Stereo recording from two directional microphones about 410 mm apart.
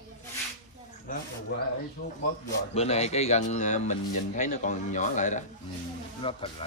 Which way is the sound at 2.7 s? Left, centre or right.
Centre.